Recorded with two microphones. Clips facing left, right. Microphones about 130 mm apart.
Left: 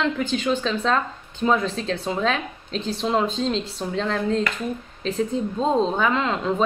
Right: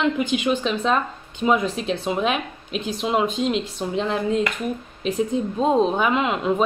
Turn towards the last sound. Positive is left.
turn(degrees=-15)  # may be behind; listen again after turning